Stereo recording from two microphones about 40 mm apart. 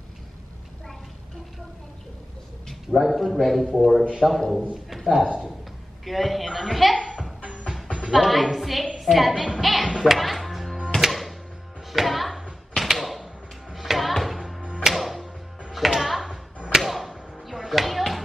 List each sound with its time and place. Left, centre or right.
3.0 s a woman's voice: centre
7.4 s music: right
8.1 s a woman's voice: centre
9.9 s music: centre
12.7 s a sound: centre
13.7 s music: centre
16.7 s a sound: centre